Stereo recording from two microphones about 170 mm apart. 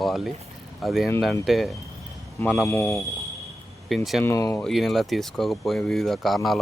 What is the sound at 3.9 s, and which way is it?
Speech, centre (ahead or behind).